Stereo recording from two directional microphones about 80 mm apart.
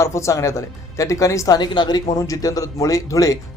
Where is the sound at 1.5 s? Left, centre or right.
Left.